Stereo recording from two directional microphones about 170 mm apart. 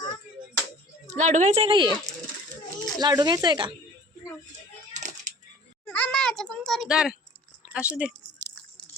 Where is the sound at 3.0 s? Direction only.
25° right (ahead or behind).